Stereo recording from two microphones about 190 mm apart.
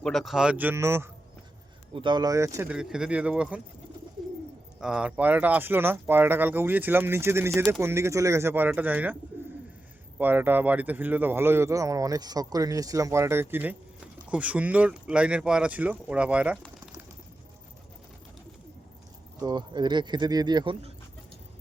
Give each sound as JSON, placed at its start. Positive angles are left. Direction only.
{"t": 0.0, "sound": "speech", "side_deg": 0}
{"t": 1.9, "sound": "speech", "side_deg": -25}
{"t": 2.6, "sound": "speech", "side_deg": -5}
{"t": 4.8, "sound": "speech", "side_deg": -5}
{"t": 10.2, "sound": "speech", "side_deg": -10}
{"t": 19.4, "sound": "speech", "side_deg": -20}